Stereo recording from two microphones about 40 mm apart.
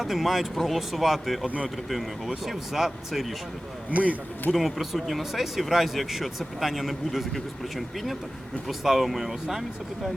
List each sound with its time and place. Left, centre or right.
0.0 s speech: centre
1.5 s speech: right
1.9 s speech: centre
3.9 s speech: right
4.5 s speech: centre